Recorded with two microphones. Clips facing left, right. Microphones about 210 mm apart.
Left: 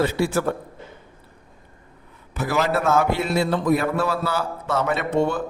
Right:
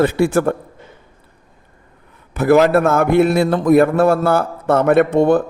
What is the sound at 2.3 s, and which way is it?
A man's voice, 55° right (ahead or behind).